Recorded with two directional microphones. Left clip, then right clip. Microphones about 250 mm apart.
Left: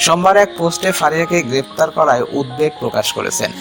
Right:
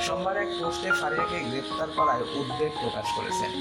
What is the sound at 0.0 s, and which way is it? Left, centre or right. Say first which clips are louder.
Speech: left 17 dB; left.